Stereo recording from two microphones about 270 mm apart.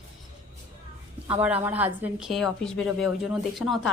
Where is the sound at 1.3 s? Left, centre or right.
Centre.